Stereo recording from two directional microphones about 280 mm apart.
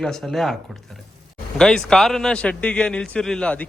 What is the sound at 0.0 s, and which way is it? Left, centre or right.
Speech, centre.